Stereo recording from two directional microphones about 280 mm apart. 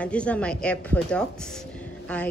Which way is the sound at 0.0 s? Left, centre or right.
Centre.